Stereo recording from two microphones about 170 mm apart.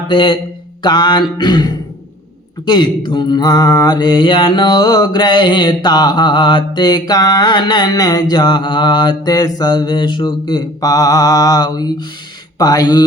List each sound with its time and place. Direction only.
0.1 s mantra: 30° left (ahead or behind)